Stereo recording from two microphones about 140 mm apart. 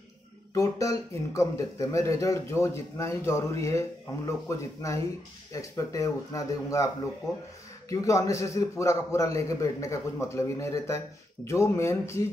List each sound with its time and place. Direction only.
0.6 s speech: 20° left (ahead or behind)
7.9 s speech: 25° left (ahead or behind)